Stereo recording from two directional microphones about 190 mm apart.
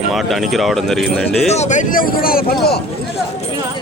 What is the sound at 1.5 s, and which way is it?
Speech, 35° left (ahead or behind).